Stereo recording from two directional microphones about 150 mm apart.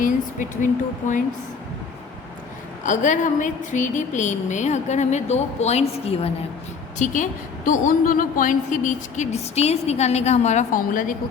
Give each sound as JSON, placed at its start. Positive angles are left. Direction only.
{"t": 0.0, "sound": "a woman's voice", "side_deg": 60}
{"t": 2.8, "sound": "a woman's voice", "side_deg": 55}
{"t": 7.0, "sound": "a woman's voice", "side_deg": 55}